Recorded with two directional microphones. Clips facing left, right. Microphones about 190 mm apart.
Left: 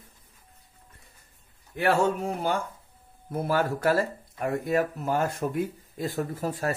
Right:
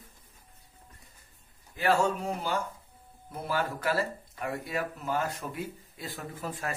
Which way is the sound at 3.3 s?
50° left (ahead or behind).